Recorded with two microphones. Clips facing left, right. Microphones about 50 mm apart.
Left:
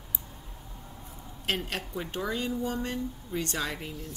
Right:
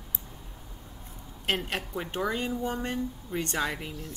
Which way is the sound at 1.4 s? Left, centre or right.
Centre.